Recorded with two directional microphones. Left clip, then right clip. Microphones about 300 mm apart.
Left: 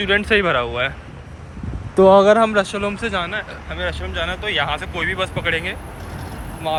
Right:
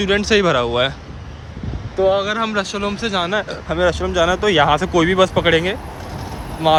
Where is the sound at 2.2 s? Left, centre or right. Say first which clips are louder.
Left 6 dB; centre.